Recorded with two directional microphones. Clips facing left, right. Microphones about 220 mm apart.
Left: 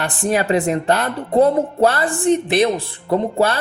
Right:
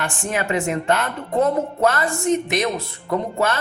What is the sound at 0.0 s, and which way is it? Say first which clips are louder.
A man's voice: left 5 dB; 35° left (ahead or behind).